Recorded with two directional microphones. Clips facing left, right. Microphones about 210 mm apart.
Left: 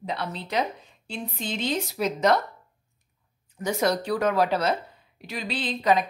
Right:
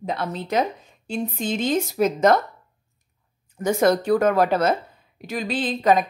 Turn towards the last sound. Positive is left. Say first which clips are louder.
# right 4 dB
turn(degrees=-45)  # may be behind; listen again after turning